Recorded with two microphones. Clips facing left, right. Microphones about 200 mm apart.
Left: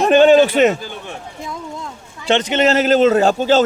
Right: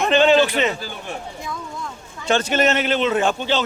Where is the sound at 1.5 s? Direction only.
25° left (ahead or behind).